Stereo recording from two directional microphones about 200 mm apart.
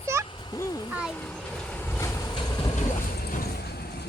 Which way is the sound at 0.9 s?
5° right (ahead or behind).